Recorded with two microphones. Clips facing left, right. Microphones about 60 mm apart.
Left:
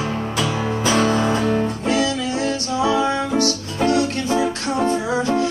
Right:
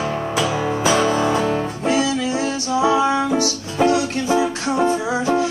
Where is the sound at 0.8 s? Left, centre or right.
Centre.